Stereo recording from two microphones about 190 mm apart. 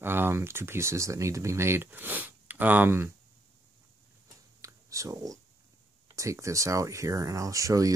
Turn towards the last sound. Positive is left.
turn(degrees=-15)  # may be behind; listen again after turning